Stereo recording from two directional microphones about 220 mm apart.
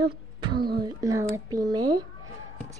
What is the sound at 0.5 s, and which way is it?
Speech, 45° right (ahead or behind).